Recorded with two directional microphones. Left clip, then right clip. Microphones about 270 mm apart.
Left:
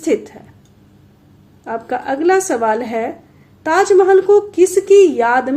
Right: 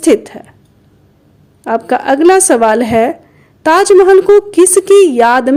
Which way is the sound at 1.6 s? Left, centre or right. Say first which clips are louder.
Right 9 dB; right.